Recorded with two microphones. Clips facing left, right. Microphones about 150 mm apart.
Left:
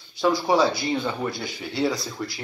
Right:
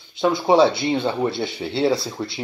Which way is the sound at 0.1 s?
25° right (ahead or behind).